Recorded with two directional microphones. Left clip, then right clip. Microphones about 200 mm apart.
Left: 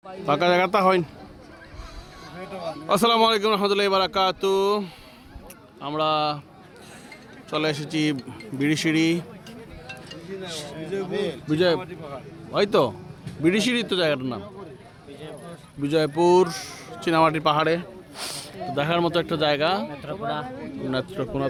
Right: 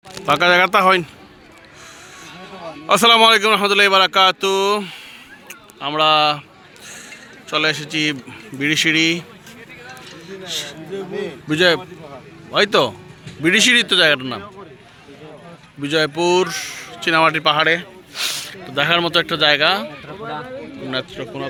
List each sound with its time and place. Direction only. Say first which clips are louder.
0.3 s speech: right 6 dB; 5° left (ahead or behind)
2.8 s speech: right 8 dB; centre (ahead or behind)
5.5 s a sound: right 7 dB; 5° right (ahead or behind)
7.5 s speech: right 7 dB; 10° left (ahead or behind)
9.8 s a sound: right 1 dB; 5° left (ahead or behind)
11.4 s a man's voice: right 7 dB; 10° right (ahead or behind)
15.8 s speech: right 3 dB; 5° left (ahead or behind)
21.1 s a man's voice: even; 40° left (ahead or behind)